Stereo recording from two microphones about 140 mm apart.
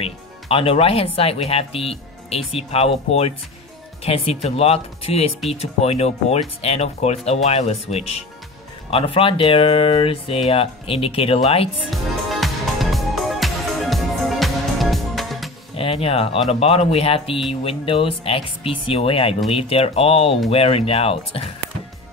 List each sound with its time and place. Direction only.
0.0 s speech: 40° left (ahead or behind)
11.9 s music: centre (ahead or behind)
15.7 s speech: 40° left (ahead or behind)